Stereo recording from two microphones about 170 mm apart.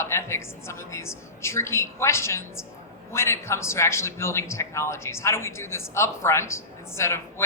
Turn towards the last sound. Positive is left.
turn(degrees=15)  # may be behind; listen again after turning